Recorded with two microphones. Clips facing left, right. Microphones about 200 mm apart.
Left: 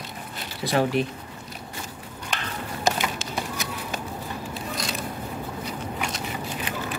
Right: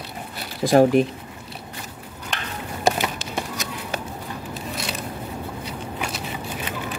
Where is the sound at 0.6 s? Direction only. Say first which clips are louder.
Right 8 dB; 40° right (ahead or behind).